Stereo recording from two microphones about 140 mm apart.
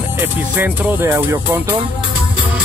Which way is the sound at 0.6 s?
15° right (ahead or behind).